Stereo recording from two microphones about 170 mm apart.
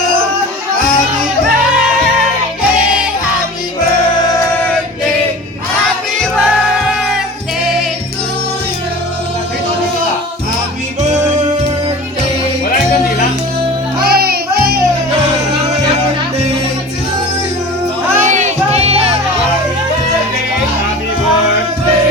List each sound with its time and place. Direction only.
14.0 s music: 65° right (ahead or behind)
18.2 s music: 45° right (ahead or behind)